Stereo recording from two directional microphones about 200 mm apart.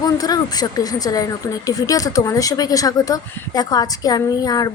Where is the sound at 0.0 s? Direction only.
20° left (ahead or behind).